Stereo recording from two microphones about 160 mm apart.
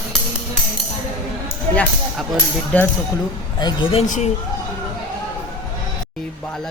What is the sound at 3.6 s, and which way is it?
Speech, 35° left (ahead or behind).